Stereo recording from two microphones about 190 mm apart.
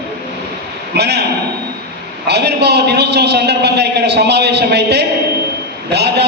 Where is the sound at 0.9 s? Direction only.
60° right (ahead or behind).